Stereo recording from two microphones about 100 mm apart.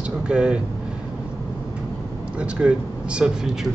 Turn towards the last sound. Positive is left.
turn(degrees=-10)  # may be behind; listen again after turning